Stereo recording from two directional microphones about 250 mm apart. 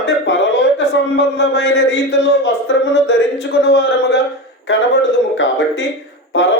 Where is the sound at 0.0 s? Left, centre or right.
Left.